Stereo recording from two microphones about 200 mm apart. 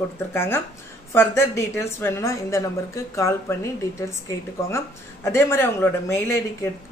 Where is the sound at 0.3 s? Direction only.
10° left (ahead or behind).